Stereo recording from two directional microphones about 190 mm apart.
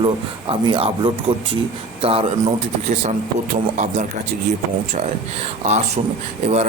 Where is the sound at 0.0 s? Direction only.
25° right (ahead or behind).